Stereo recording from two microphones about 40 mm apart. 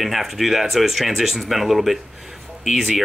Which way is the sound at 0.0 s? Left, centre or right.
Centre.